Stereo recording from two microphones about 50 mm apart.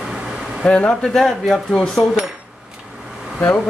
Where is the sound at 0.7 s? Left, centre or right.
Left.